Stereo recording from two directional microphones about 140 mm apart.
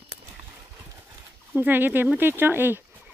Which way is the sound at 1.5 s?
15° right (ahead or behind).